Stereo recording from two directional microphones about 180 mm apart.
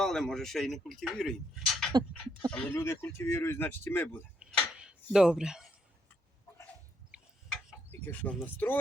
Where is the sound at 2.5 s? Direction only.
10° left (ahead or behind).